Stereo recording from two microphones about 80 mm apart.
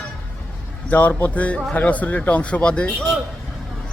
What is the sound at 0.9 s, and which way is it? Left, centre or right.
Speech, left.